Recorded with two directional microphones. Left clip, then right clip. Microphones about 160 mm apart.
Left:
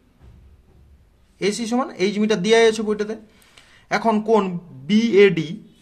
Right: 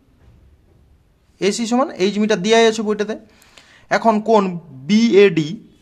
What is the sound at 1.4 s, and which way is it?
Speech, 40° right (ahead or behind).